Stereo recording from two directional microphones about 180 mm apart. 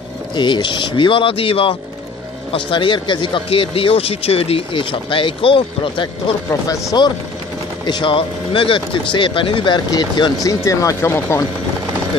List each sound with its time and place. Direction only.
0.4 s speech: 25° left (ahead or behind)
6.7 s speech: 20° left (ahead or behind)